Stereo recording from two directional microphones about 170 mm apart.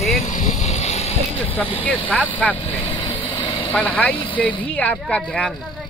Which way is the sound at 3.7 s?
10° left (ahead or behind).